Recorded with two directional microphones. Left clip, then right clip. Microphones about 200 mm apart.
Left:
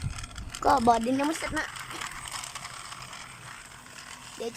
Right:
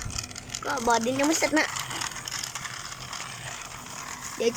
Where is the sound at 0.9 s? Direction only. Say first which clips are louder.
Right 3 dB; 5° left (ahead or behind).